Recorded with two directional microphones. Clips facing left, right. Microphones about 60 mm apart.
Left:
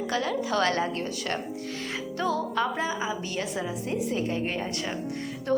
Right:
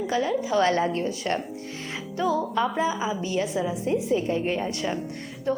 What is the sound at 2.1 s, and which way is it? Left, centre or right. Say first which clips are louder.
Speech: right 3 dB; centre.